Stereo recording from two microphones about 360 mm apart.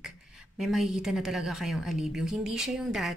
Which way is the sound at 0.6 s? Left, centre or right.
Centre.